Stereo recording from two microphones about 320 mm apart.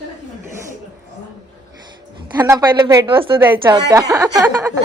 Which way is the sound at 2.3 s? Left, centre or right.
Centre.